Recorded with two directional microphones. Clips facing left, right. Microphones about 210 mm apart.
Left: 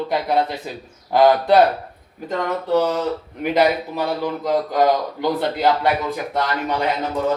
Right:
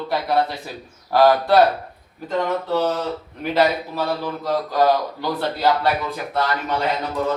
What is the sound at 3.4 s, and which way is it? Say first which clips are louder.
A man's voice: left 1 dB; 15° left (ahead or behind).